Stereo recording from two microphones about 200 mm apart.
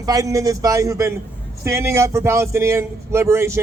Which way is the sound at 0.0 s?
15° right (ahead or behind).